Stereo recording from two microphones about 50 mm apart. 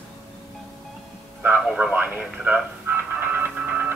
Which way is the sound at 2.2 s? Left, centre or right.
Right.